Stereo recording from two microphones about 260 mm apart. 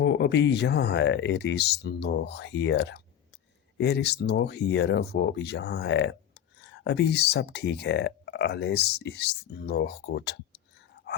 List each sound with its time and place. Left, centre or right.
0.0 s speech: left